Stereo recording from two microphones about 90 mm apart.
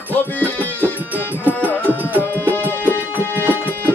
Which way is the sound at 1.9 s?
20° right (ahead or behind).